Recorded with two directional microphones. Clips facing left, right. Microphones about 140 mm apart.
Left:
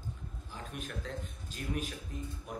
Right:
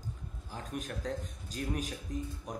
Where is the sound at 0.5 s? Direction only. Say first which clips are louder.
Right 3 dB; 40° right (ahead or behind).